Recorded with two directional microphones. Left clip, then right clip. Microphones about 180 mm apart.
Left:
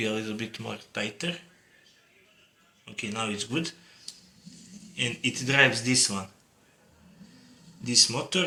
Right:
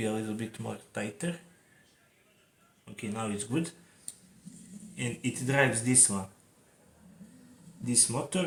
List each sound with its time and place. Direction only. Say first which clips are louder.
0.0 s speech: left 3 dB; 55° right (ahead or behind)
2.8 s speech: left 5 dB; 55° right (ahead or behind)
4.9 s speech: left 7 dB; 60° right (ahead or behind)
7.9 s speech: left 8 dB; 60° right (ahead or behind)